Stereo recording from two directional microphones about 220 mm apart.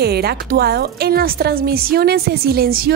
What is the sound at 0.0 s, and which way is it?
A woman's voice, 45° right (ahead or behind).